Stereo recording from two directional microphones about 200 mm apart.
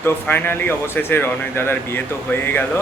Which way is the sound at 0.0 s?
10° left (ahead or behind).